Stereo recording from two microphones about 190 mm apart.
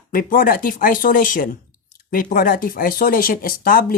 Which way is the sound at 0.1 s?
45° left (ahead or behind).